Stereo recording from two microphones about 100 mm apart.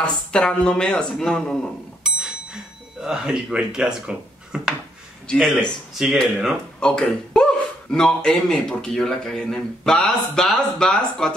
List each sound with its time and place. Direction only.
0.0 s speech: 10° left (ahead or behind)
2.0 s bicycle bell: 5° right (ahead or behind)
3.0 s speech: 5° right (ahead or behind)
5.3 s a man's voice: 5° left (ahead or behind)